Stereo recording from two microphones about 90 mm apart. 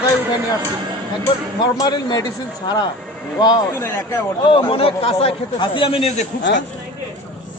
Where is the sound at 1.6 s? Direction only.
50° left (ahead or behind).